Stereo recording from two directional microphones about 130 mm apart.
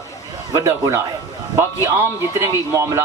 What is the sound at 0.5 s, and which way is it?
Speech, 25° right (ahead or behind).